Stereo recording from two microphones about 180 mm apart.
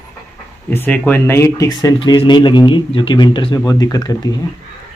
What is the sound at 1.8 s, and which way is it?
Speech, 25° left (ahead or behind).